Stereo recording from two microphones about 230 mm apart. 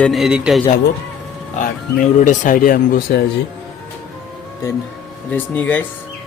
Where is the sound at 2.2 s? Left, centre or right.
Left.